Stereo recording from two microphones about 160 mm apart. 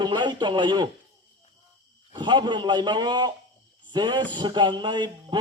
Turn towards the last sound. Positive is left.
turn(degrees=-30)  # may be behind; listen again after turning